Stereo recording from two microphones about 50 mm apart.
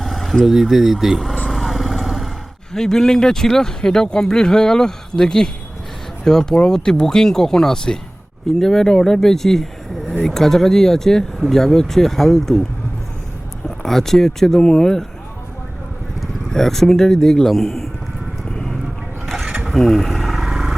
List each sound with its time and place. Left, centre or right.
0.0 s a sound: centre
0.4 s speech: centre
1.5 s vehicle: centre
2.7 s speech: centre
13.8 s speech: centre
16.2 s a man's voice: centre
18.5 s clip-clop: centre
19.2 s mechanisms: centre
19.6 s a sound: centre